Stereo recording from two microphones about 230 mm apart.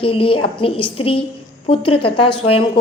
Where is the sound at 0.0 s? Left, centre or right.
Left.